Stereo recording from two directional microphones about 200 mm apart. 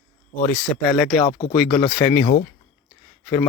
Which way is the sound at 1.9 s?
10° left (ahead or behind).